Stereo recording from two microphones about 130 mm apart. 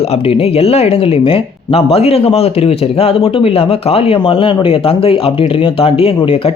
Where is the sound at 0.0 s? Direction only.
50° left (ahead or behind).